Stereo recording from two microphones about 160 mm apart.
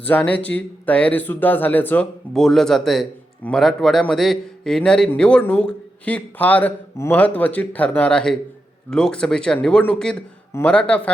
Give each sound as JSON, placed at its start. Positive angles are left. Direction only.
{"t": 0.0, "sound": "speech", "side_deg": 10}